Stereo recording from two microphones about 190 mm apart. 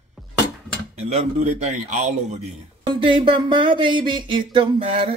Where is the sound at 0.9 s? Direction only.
35° right (ahead or behind).